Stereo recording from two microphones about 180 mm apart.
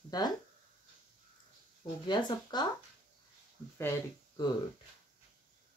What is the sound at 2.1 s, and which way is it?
Speech, 25° left (ahead or behind).